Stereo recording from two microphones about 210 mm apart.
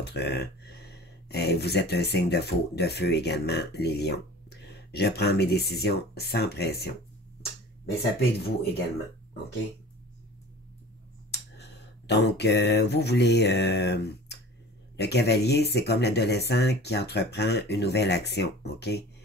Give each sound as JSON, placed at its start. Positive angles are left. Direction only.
{"t": 0.0, "sound": "speech", "side_deg": 50}
{"t": 8.2, "sound": "speech", "side_deg": 50}
{"t": 12.1, "sound": "speech", "side_deg": 55}